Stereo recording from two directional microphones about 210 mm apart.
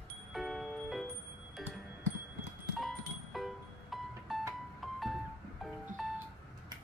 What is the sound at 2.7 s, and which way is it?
Music, centre (ahead or behind).